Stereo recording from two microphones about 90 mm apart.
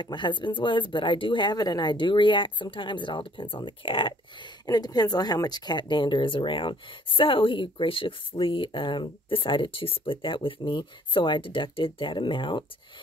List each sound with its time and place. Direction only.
0.0 s speech: 60° left (ahead or behind)
4.6 s speech: 50° left (ahead or behind); by 12.6 s 65° left (ahead or behind)